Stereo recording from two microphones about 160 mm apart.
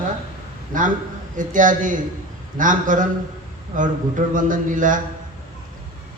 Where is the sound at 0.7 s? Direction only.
55° right (ahead or behind).